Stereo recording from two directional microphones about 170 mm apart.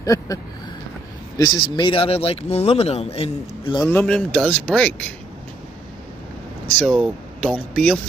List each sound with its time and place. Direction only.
0.0 s speech: 20° left (ahead or behind)
1.4 s speech: 25° left (ahead or behind)
3.8 s speech: 10° left (ahead or behind)
6.8 s speech: 5° left (ahead or behind)